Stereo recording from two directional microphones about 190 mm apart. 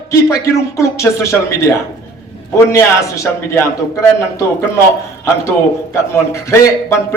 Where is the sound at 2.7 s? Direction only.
15° left (ahead or behind).